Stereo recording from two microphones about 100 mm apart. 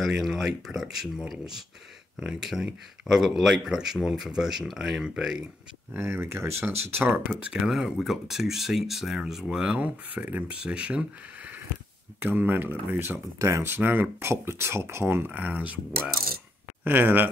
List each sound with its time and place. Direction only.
0.0 s speech: centre (ahead or behind)
5.9 s speech: 25° right (ahead or behind)
7.5 s speech: 5° right (ahead or behind)
12.2 s speech: 20° right (ahead or behind)
16.8 s speech: 20° right (ahead or behind)